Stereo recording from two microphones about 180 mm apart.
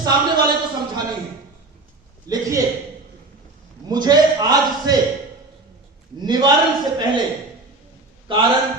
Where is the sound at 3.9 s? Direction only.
20° right (ahead or behind).